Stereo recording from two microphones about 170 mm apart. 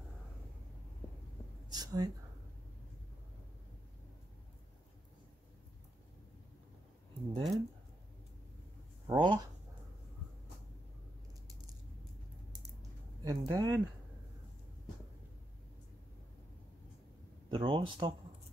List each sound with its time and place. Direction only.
1.7 s speech: 25° right (ahead or behind)
7.3 s speech: 25° right (ahead or behind)
9.0 s speech: 25° right (ahead or behind)
13.2 s speech: 25° right (ahead or behind)
17.5 s speech: 30° right (ahead or behind)